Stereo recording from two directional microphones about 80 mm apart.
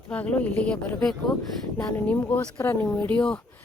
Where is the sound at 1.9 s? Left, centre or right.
Left.